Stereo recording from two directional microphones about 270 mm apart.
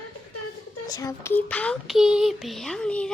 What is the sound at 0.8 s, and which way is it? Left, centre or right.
Speech, centre.